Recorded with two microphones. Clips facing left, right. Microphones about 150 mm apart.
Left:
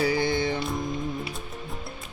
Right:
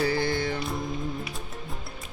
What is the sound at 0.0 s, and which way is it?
Music, 15° left (ahead or behind).